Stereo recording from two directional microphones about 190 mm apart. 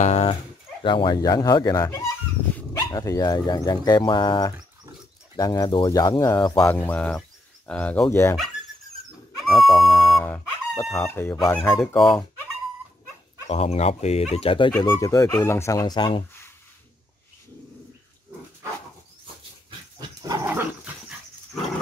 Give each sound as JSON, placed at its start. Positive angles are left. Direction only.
{"t": 0.0, "sound": "dog", "side_deg": 30}
{"t": 0.8, "sound": "speech", "side_deg": 25}
{"t": 6.7, "sound": "speech", "side_deg": 10}
{"t": 9.5, "sound": "speech", "side_deg": 0}
{"t": 13.5, "sound": "speech", "side_deg": 35}
{"t": 20.0, "sound": "dog", "side_deg": -20}